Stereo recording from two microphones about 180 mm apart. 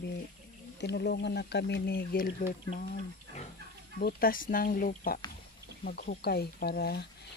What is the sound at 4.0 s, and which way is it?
Speech, 55° left (ahead or behind).